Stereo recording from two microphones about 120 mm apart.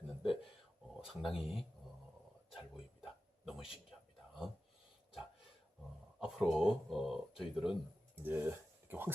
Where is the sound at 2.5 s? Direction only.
5° right (ahead or behind).